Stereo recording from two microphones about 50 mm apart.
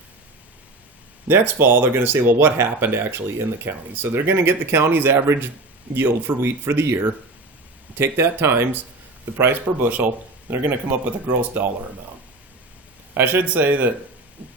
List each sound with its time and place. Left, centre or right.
1.3 s speech: right
5.1 s a man's voice: right
5.9 s speech: right
13.1 s speech: right